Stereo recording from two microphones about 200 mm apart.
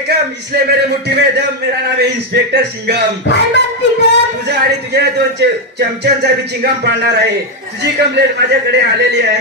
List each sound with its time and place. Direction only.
0.1 s a man's voice: 55° right (ahead or behind)
3.3 s a sound: 60° left (ahead or behind)
4.5 s a man's voice: 55° right (ahead or behind)
8.4 s a man's voice: 55° right (ahead or behind)